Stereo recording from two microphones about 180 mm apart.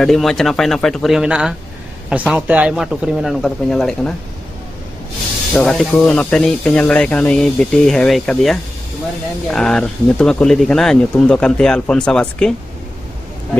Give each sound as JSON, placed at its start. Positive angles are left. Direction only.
{"t": 0.0, "sound": "speech", "side_deg": 0}
{"t": 5.5, "sound": "speech", "side_deg": 5}